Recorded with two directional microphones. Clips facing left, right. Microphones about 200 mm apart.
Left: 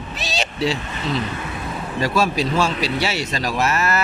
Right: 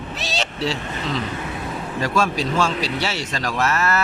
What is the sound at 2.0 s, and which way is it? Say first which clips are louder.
Speech: left 2 dB; 10° left (ahead or behind).